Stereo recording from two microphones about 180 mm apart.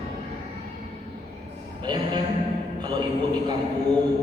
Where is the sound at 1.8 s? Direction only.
25° right (ahead or behind).